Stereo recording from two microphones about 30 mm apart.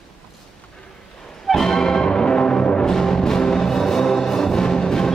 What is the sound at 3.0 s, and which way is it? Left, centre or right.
Music, centre.